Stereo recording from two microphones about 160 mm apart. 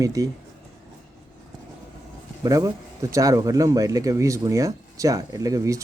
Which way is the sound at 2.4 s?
20° right (ahead or behind).